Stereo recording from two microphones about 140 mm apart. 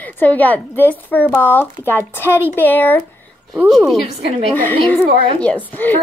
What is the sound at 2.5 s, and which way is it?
Speech, 15° left (ahead or behind).